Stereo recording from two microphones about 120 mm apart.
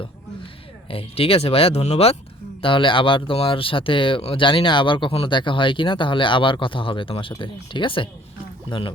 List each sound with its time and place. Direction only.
0.9 s speech: 55° left (ahead or behind)
2.6 s speech: 45° left (ahead or behind)